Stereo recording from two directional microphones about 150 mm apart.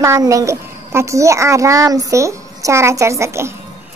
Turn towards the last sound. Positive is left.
turn(degrees=-20)  # may be behind; listen again after turning